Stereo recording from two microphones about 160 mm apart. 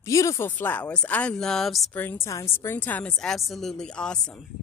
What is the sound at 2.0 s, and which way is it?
Speech, 15° left (ahead or behind).